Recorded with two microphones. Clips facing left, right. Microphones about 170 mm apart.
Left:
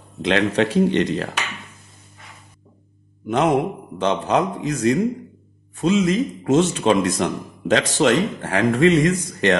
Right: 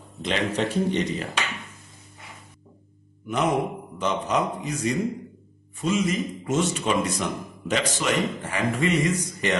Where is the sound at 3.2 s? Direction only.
90° left.